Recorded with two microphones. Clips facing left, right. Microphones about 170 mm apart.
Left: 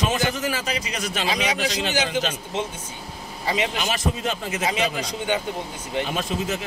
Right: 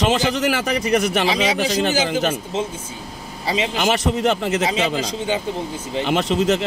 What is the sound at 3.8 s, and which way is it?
Speech, 70° right (ahead or behind).